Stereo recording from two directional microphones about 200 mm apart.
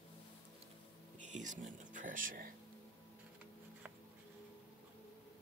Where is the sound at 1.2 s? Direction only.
40° right (ahead or behind).